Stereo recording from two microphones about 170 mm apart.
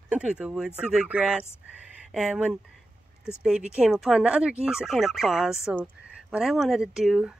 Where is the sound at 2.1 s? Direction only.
5° right (ahead or behind).